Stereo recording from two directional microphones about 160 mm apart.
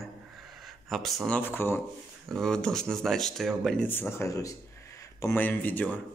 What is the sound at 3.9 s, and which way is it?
Speech, 15° left (ahead or behind).